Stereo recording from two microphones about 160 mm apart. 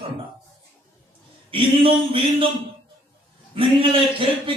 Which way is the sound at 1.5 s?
35° right (ahead or behind).